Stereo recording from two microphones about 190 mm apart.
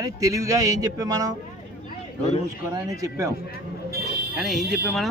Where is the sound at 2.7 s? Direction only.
15° right (ahead or behind).